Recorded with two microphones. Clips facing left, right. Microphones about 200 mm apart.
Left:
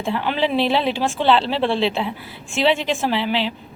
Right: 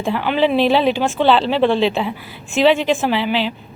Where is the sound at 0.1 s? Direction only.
25° left (ahead or behind).